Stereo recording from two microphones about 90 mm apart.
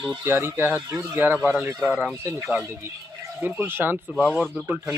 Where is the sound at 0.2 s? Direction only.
25° right (ahead or behind).